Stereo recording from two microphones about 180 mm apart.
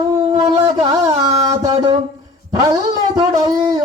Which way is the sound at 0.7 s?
20° right (ahead or behind).